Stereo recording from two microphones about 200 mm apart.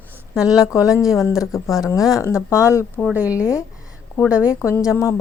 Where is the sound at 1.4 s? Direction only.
15° left (ahead or behind).